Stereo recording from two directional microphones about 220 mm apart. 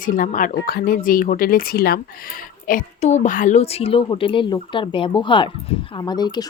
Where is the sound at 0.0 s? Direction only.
35° left (ahead or behind).